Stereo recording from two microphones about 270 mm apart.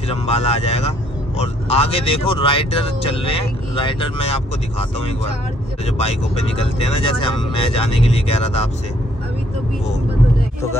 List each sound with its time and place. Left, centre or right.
0.1 s speech: left